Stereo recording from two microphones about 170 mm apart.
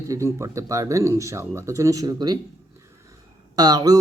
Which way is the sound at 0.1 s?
15° right (ahead or behind).